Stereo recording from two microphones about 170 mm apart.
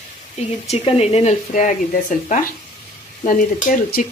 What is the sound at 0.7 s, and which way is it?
Speech, 35° left (ahead or behind).